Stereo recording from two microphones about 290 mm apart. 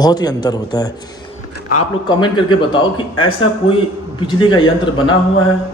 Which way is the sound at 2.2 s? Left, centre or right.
Centre.